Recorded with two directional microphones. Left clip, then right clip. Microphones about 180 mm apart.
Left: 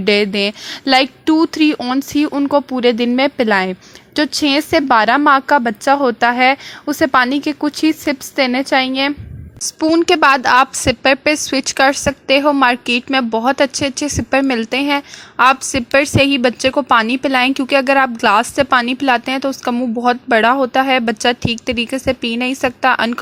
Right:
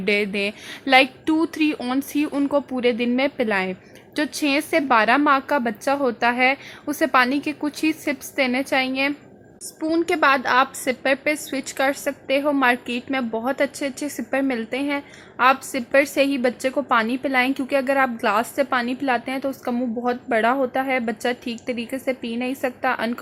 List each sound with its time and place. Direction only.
0.0 s speech: 40° left (ahead or behind)